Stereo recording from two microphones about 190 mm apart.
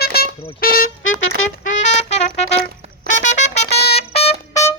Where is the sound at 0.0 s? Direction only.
55° left (ahead or behind).